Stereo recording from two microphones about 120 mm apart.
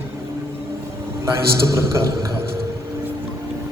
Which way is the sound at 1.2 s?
25° right (ahead or behind).